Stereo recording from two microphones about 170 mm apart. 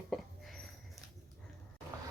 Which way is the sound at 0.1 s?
Centre (ahead or behind).